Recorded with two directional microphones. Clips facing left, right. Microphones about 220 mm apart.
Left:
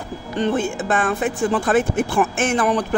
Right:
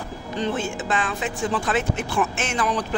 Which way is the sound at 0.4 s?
55° left (ahead or behind).